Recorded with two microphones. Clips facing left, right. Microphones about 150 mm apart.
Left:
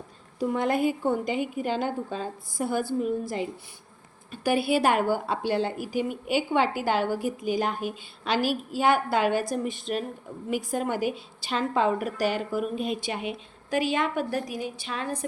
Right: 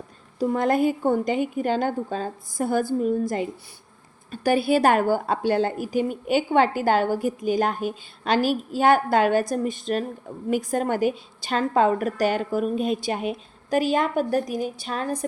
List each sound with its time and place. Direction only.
0.3 s a woman's voice: 40° right (ahead or behind)